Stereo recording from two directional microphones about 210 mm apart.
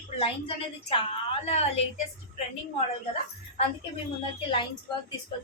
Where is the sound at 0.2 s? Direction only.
25° left (ahead or behind).